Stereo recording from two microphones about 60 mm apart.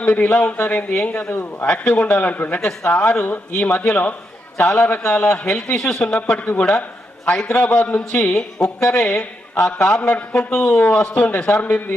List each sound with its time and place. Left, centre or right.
0.0 s speech: left
10.0 s speech: left